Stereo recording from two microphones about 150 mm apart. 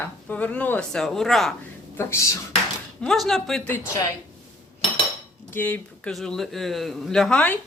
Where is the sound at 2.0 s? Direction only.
20° left (ahead or behind).